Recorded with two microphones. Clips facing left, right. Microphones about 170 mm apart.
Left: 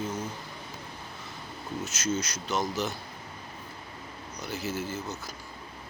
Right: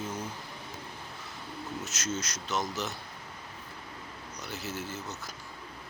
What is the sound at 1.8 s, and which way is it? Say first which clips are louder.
Speech: left 7 dB; centre (ahead or behind).